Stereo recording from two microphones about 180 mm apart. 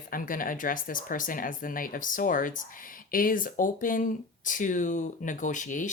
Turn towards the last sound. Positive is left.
turn(degrees=45)  # may be behind; listen again after turning